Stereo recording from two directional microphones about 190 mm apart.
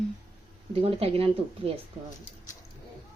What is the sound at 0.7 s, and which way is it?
Speech, 30° right (ahead or behind).